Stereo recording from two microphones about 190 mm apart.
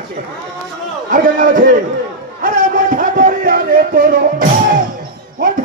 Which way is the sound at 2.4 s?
45° right (ahead or behind).